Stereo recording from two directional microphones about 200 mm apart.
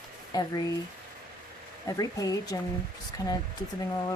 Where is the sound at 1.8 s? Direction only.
15° left (ahead or behind).